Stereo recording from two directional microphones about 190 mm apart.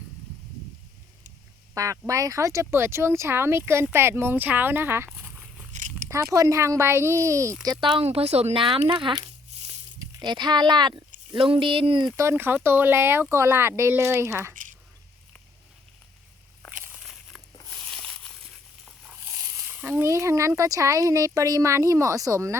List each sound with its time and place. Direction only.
1.7 s speech: 15° right (ahead or behind)
16.8 s walk: 5° right (ahead or behind)
17.6 s a sound: 5° left (ahead or behind)
19.4 s speech: 15° right (ahead or behind)